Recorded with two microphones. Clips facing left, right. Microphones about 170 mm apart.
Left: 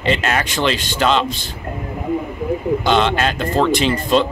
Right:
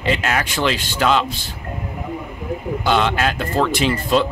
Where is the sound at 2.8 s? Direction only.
5° right (ahead or behind).